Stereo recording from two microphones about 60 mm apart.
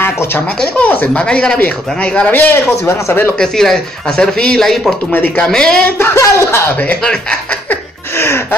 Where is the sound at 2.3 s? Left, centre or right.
Left.